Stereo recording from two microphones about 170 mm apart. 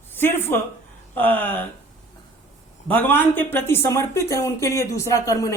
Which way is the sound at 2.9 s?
10° left (ahead or behind).